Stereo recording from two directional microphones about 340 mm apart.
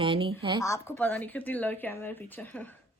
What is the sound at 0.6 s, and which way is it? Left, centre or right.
Speech, centre.